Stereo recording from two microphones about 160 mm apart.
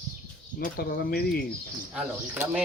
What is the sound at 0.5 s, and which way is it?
Speech, 60° left (ahead or behind).